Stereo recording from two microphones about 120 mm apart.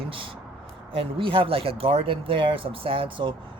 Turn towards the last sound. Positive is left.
turn(degrees=-45)  # may be behind; listen again after turning